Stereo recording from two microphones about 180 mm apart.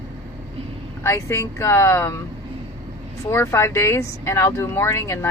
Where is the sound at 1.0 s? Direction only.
15° left (ahead or behind).